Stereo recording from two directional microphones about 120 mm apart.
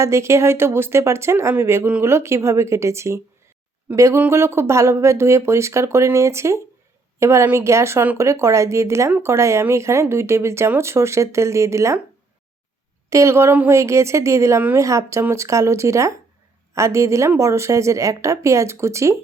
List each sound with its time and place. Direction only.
0.0 s speech: 25° right (ahead or behind)
13.1 s speech: 25° right (ahead or behind)